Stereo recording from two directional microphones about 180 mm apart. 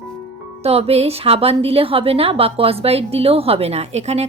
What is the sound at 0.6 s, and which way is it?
A woman's voice, 35° right (ahead or behind).